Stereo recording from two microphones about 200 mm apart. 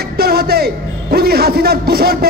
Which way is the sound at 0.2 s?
50° right (ahead or behind).